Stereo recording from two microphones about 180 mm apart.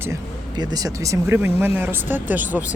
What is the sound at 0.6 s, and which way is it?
Speech, 20° right (ahead or behind).